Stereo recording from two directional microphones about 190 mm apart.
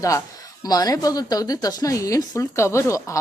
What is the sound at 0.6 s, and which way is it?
A woman's voice, 20° left (ahead or behind).